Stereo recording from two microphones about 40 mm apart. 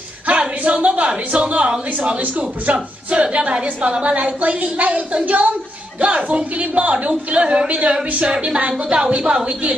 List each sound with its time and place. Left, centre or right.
0.3 s a sound: right
0.8 s a woman's voice: right
8.8 s a woman's voice: centre
9.5 s a woman's voice: right